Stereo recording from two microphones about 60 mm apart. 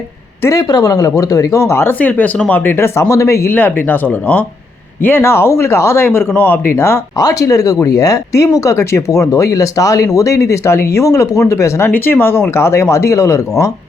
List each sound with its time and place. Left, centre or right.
0.5 s speech: left
2.0 s speech: left
3.5 s speech: left
7.2 s speech: left
11.9 s speech: left